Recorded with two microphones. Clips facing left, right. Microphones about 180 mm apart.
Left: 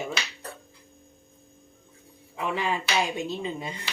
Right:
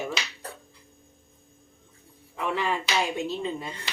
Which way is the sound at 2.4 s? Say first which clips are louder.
Even; 15° left (ahead or behind).